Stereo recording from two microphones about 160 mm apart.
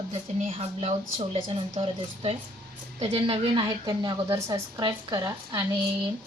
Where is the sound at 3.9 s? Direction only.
25° right (ahead or behind).